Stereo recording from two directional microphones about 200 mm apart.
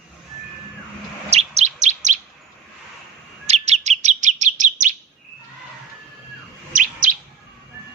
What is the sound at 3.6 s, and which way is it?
Chirp, 35° right (ahead or behind).